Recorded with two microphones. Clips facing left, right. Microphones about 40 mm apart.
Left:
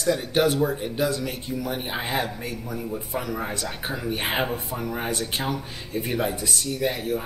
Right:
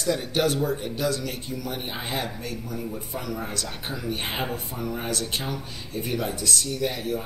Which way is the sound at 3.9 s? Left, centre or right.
Centre.